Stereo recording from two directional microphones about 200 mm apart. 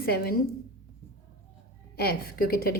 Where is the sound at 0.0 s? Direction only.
50° left (ahead or behind).